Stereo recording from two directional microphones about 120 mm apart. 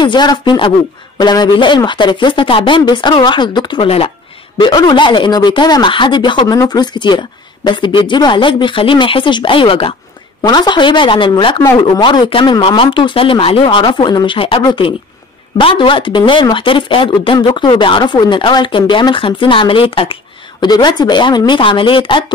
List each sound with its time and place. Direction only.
0.0 s speech: 40° left (ahead or behind)
10.4 s speech: 35° left (ahead or behind)
20.6 s speech: 35° left (ahead or behind)